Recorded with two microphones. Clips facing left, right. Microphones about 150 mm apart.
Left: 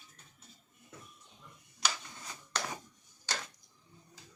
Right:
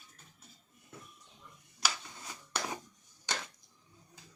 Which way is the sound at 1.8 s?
5° right (ahead or behind).